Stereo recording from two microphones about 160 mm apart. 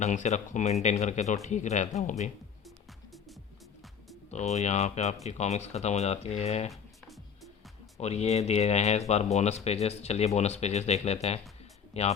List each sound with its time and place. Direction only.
0.0 s speech: 45° left (ahead or behind)
2.6 s music: centre (ahead or behind)
4.3 s speech: 45° left (ahead or behind)
6.7 s music: centre (ahead or behind)
7.9 s speech: 40° left (ahead or behind)